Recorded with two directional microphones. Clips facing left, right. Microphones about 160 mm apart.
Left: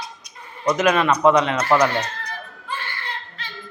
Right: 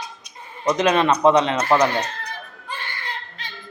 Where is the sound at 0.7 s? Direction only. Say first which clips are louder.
Right 1 dB; 30° right (ahead or behind).